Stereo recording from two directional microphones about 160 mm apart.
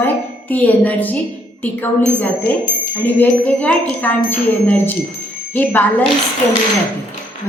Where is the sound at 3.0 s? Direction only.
10° left (ahead or behind).